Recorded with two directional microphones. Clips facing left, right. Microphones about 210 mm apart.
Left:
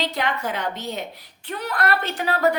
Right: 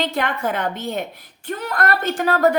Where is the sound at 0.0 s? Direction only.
50° right (ahead or behind).